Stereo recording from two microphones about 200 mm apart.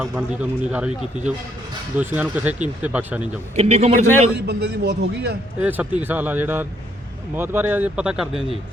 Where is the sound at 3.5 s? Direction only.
35° right (ahead or behind).